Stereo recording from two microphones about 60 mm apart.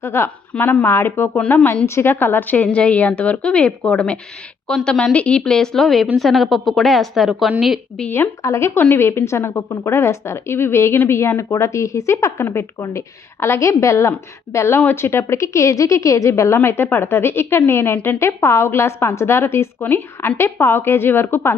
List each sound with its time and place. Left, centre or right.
0.0 s a woman's voice: left
0.5 s a woman's voice: centre
0.9 s a woman's voice: left; by 7.5 s centre
8.4 s a woman's voice: left
14.9 s a woman's voice: left
16.6 s a woman's voice: left
18.2 s a woman's voice: left